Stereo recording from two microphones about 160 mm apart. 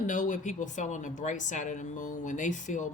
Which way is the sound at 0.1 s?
50° left (ahead or behind).